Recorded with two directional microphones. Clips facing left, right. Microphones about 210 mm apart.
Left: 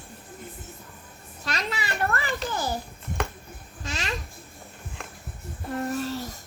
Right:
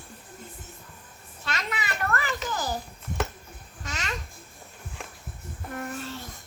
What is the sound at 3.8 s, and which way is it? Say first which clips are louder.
Babbling: left 3 dB; 30° left (ahead or behind).